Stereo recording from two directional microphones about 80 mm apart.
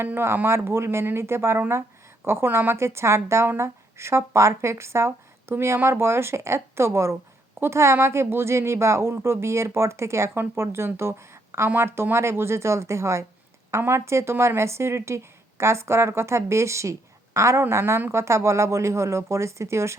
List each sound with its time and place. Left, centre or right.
0.0 s a woman's voice: right